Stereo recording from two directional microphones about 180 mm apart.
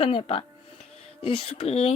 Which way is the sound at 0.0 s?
30° left (ahead or behind).